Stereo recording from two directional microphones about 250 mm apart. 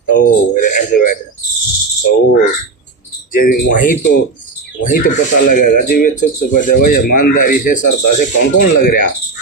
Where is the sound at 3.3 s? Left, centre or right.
Left.